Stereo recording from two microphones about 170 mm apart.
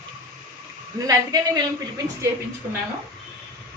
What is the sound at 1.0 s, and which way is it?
Speech, 20° right (ahead or behind).